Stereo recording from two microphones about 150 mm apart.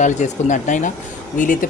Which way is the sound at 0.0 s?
55° left (ahead or behind).